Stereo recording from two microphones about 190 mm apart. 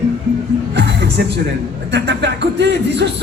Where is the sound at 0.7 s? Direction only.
65° right (ahead or behind).